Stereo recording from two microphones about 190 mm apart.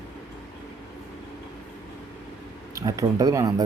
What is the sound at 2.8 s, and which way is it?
Speech, 15° right (ahead or behind).